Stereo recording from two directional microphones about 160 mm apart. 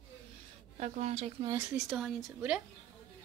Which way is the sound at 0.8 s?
40° right (ahead or behind).